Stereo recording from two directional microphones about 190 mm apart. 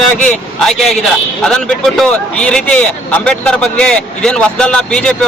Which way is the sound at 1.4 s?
Centre (ahead or behind).